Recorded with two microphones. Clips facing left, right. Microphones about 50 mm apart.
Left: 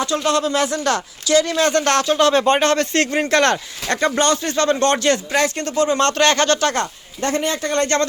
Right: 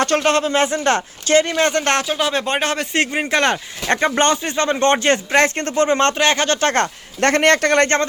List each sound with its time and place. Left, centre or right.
0.0 s speech: right
0.3 s speech: right
2.0 s speech: centre
3.8 s speech: right
6.1 s speech: centre
6.6 s speech: right
7.2 s a man's voice: right